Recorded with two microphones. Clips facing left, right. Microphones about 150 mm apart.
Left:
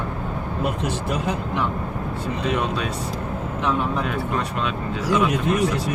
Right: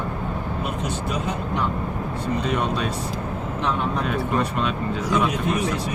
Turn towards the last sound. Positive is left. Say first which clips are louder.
# left 2 dB
turn(degrees=5)  # may be behind; listen again after turning